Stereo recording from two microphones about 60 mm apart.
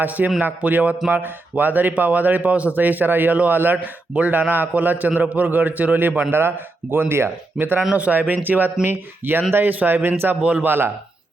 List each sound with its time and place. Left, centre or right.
0.0 s a man's voice: right
7.9 s a man's voice: right